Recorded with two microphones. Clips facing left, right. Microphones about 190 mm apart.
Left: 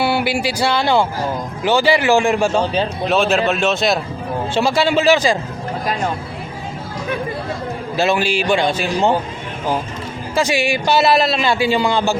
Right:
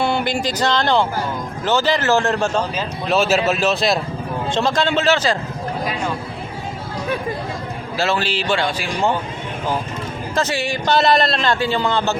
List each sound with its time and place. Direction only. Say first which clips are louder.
0.0 s a man's voice: left 2 dB; 5° left (ahead or behind)
3.1 s a man's voice: right 1 dB; centre (ahead or behind)
7.9 s a man's voice: left 4 dB; 15° left (ahead or behind)
10.3 s a man's voice: left 4 dB; 10° left (ahead or behind)